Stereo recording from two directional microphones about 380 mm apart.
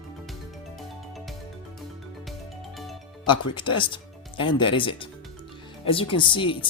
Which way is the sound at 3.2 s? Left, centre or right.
Centre.